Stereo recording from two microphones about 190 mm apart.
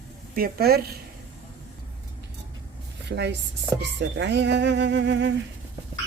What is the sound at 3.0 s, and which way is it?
A woman's voice, 65° right (ahead or behind).